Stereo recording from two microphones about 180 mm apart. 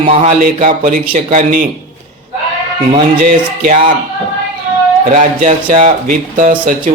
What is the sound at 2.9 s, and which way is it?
A man's voice, 45° right (ahead or behind).